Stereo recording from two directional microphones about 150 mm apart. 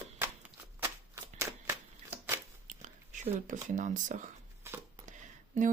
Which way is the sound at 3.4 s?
55° right (ahead or behind).